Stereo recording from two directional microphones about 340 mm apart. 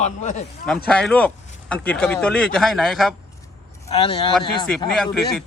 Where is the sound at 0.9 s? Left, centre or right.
Centre.